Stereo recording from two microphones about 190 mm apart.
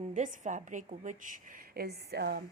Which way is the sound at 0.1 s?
40° right (ahead or behind).